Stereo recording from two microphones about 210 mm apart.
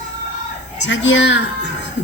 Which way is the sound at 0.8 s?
60° left (ahead or behind).